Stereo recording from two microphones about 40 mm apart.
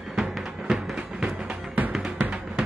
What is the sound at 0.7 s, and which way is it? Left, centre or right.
Music, centre.